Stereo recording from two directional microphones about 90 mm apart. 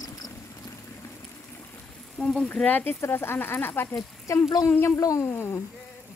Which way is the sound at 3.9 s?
35° left (ahead or behind).